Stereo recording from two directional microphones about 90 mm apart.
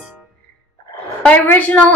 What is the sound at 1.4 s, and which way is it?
Speech, 20° left (ahead or behind).